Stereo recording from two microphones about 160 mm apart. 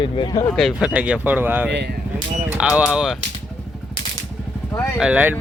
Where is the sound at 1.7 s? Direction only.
90° right.